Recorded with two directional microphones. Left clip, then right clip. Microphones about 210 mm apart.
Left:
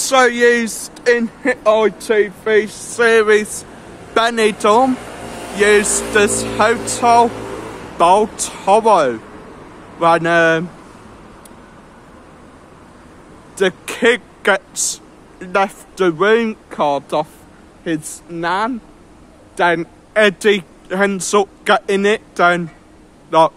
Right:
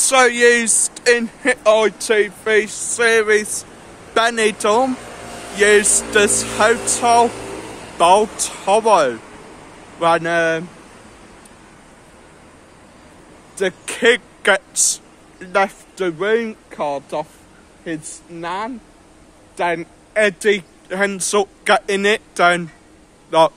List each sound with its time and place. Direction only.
0.0 s speech: 5° right (ahead or behind)
4.9 s a sound: 45° left (ahead or behind)
5.6 s speech: centre (ahead or behind)
13.6 s a man's voice: centre (ahead or behind)